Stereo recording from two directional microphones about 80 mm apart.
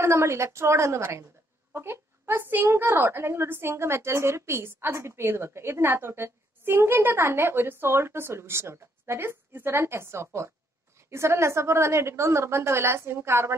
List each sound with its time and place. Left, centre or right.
0.0 s a woman's voice: right